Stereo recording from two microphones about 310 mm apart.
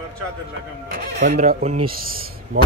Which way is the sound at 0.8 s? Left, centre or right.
Right.